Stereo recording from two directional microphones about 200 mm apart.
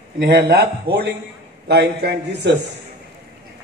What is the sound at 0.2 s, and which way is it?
A man's voice, 50° right (ahead or behind).